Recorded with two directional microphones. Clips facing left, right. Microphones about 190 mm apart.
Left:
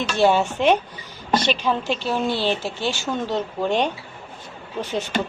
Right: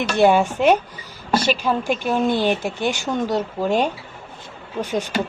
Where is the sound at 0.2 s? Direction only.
10° right (ahead or behind).